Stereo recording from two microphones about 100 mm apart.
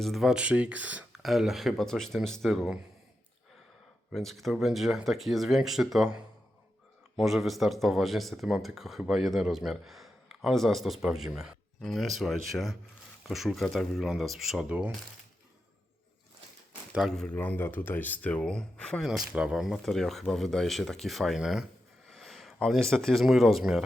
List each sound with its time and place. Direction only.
0.0 s speech: centre (ahead or behind)
1.1 s speech: centre (ahead or behind)
4.1 s speech: centre (ahead or behind)
7.2 s speech: centre (ahead or behind)
16.9 s speech: centre (ahead or behind)
17.2 s speech: 15° left (ahead or behind)
19.0 s speech: 5° right (ahead or behind)
22.1 s a sound: 5° left (ahead or behind)
22.6 s speech: 5° left (ahead or behind)